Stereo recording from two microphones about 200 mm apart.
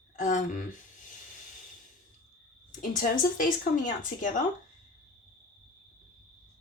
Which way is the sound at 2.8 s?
40° left (ahead or behind).